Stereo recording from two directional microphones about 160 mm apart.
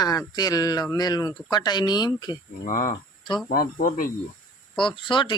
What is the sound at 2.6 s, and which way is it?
Speech, 55° left (ahead or behind).